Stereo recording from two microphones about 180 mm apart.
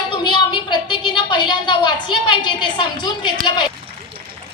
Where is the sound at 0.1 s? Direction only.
25° left (ahead or behind).